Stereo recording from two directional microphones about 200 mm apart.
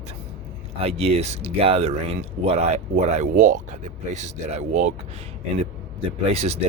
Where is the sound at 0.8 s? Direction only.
30° right (ahead or behind).